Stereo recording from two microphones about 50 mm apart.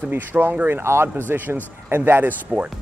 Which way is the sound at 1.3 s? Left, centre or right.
Right.